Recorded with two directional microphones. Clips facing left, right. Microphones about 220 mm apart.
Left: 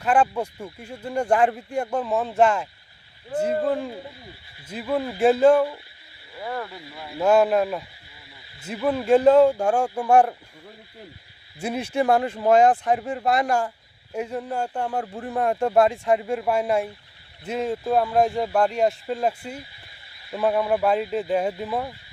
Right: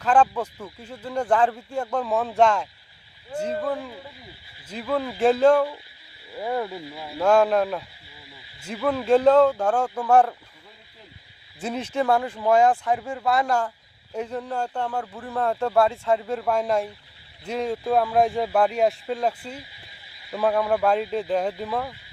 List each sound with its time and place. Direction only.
0.0 s speech: 10° left (ahead or behind)
3.6 s speech: 30° left (ahead or behind)
4.7 s speech: 10° left (ahead or behind)
6.4 s speech: 15° right (ahead or behind)
7.2 s speech: 5° left (ahead or behind)
11.6 s speech: 10° left (ahead or behind)
14.8 s speech: 25° left (ahead or behind)
15.3 s speech: 15° left (ahead or behind)